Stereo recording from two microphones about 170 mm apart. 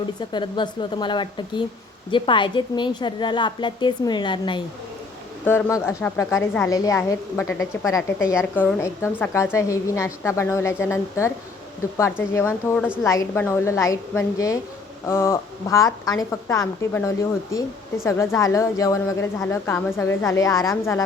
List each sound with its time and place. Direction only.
0.3 s a woman's voice: 25° left (ahead or behind)
5.5 s a woman's voice: 15° left (ahead or behind)